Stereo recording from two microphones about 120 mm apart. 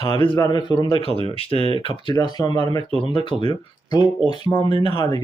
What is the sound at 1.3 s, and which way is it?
Speech, 50° left (ahead or behind).